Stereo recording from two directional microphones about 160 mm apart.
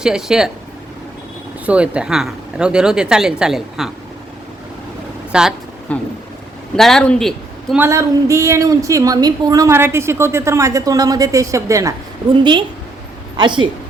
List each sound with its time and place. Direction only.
0.0 s speech: 5° right (ahead or behind)
1.6 s speech: 5° right (ahead or behind)
5.3 s speech: 5° right (ahead or behind)
5.9 s speech: 10° left (ahead or behind)
7.8 s a woman's voice: 20° right (ahead or behind)
12.4 s a woman's voice: 30° right (ahead or behind)